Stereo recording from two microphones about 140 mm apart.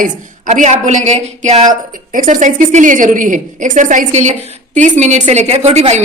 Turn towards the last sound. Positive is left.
turn(degrees=-50)  # may be behind; listen again after turning